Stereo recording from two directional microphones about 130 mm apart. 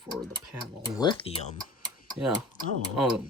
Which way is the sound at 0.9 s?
35° left (ahead or behind).